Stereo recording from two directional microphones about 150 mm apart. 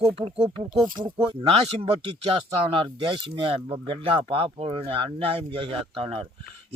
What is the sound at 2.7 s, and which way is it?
Speech, 35° right (ahead or behind).